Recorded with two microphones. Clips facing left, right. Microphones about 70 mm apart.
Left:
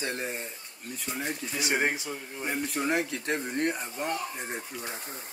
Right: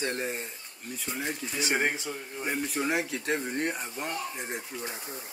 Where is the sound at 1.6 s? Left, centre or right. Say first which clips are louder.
Even; left.